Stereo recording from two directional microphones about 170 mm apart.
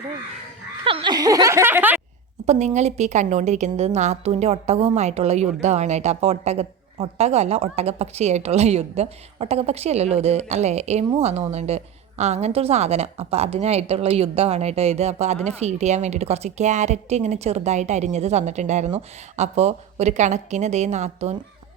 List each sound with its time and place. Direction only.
0.9 s snicker: 30° right (ahead or behind); by 2.0 s 10° right (ahead or behind)
2.5 s a woman's voice: 45° right (ahead or behind)